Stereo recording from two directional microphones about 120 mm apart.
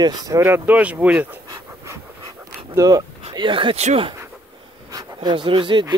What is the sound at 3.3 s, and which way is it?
Speech, 45° right (ahead or behind).